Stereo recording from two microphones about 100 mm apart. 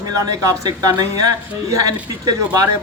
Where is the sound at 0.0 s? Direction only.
40° right (ahead or behind).